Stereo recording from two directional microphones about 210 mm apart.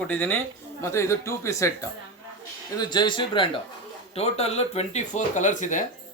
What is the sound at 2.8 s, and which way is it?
Speech, 20° left (ahead or behind).